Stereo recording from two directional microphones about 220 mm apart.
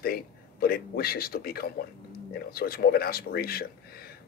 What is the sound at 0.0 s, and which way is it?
A man's voice, 40° left (ahead or behind).